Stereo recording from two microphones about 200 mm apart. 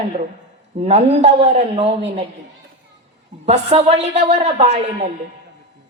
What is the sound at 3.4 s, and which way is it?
A woman's voice, 30° right (ahead or behind).